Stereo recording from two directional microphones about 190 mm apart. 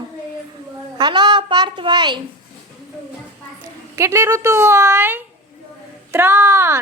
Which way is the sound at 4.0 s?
15° right (ahead or behind).